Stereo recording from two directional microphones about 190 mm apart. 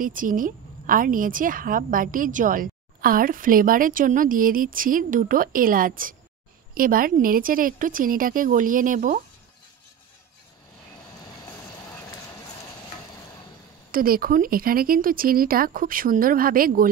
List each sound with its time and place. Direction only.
0.0 s a woman's voice: 45° right (ahead or behind)
11.4 s vehicle: 20° left (ahead or behind)
13.9 s a woman's voice: 50° right (ahead or behind)